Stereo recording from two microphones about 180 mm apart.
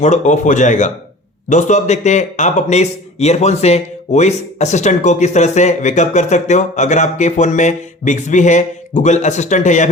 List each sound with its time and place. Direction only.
0.0 s a man's voice: 40° left (ahead or behind)